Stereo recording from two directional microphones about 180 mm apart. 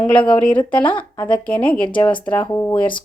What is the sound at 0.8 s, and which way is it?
Speech, 30° left (ahead or behind).